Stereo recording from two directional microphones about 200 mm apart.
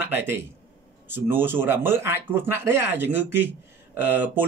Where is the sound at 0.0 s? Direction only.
10° right (ahead or behind).